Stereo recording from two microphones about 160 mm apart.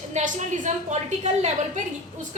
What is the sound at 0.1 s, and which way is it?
A woman's voice, 45° right (ahead or behind).